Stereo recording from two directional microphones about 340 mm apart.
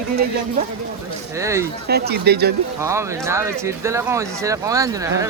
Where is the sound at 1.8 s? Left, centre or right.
Right.